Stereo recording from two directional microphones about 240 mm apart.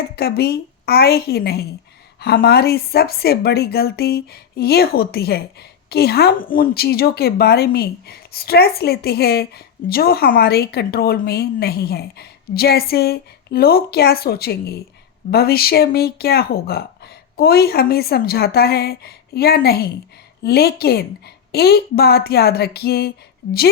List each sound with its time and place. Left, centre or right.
0.2 s speech: left